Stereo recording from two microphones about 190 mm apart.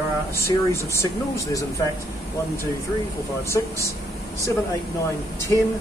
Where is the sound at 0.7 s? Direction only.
15° left (ahead or behind).